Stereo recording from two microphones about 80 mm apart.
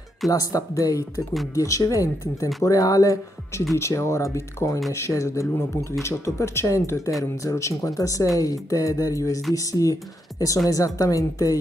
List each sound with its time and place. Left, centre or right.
0.3 s speech: left
3.7 s speech: left